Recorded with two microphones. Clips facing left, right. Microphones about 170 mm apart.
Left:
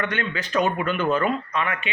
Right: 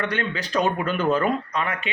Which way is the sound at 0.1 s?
35° right (ahead or behind).